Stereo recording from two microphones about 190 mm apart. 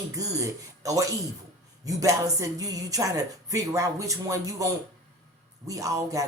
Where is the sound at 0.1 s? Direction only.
15° right (ahead or behind).